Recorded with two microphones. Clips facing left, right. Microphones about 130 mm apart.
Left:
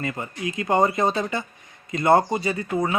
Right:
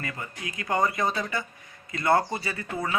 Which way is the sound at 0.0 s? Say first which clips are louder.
Left 7 dB; 25° left (ahead or behind).